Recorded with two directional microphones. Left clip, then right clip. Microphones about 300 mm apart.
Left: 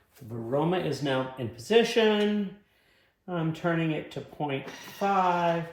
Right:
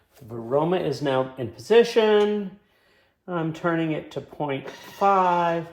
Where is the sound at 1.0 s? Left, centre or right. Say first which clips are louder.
Right 5 dB; centre.